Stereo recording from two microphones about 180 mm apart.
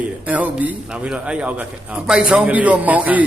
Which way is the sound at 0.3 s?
10° right (ahead or behind).